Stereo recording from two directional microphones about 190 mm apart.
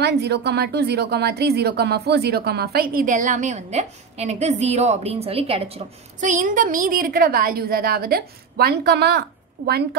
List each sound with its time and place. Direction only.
0.0 s speech: 60° right (ahead or behind); by 5.8 s 30° right (ahead or behind)
6.2 s a woman's voice: 40° right (ahead or behind)